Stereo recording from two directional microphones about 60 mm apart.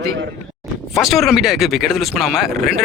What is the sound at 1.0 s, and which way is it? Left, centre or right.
Speech, centre.